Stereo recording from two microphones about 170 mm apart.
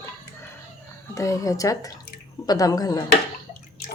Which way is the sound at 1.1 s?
20° left (ahead or behind).